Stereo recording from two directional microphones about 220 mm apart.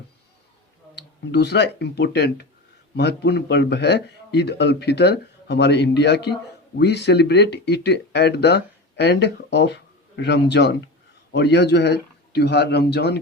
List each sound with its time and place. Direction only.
0.9 s a man's voice: 50° left (ahead or behind)